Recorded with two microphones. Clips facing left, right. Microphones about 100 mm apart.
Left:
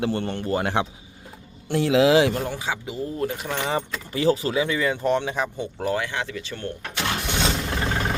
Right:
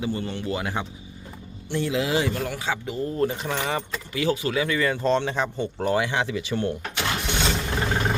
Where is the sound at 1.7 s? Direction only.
90° left.